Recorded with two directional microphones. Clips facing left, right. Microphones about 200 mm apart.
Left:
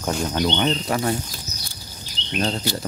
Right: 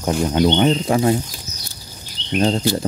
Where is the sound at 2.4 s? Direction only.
20° right (ahead or behind).